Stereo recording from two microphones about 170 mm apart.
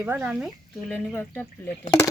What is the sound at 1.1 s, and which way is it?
Speech, 15° left (ahead or behind).